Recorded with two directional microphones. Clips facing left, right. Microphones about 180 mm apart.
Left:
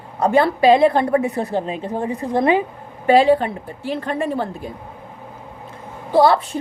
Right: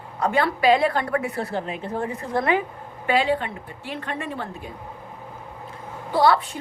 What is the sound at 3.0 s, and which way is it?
A woman's voice, 35° left (ahead or behind).